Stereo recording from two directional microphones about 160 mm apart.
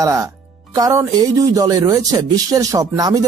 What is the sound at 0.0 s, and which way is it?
Speech, 20° right (ahead or behind).